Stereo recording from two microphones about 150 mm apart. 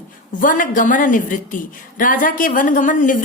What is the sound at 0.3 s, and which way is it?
A woman's voice, 60° left (ahead or behind).